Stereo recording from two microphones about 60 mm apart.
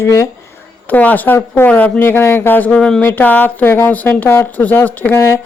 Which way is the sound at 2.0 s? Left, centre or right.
Left.